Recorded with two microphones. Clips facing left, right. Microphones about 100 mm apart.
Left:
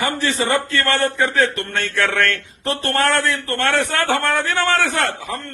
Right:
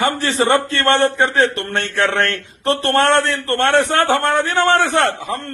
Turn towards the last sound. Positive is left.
turn(degrees=-25)  # may be behind; listen again after turning